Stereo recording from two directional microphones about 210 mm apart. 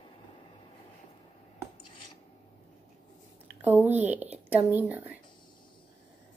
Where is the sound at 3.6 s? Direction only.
10° right (ahead or behind).